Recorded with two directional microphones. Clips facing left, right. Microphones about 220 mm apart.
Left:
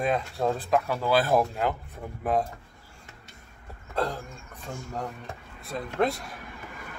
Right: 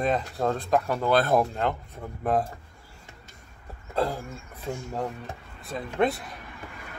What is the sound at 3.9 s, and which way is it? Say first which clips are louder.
Speech: right 2 dB; 5° right (ahead or behind).